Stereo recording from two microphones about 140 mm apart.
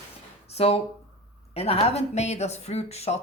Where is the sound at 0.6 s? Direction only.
45° left (ahead or behind).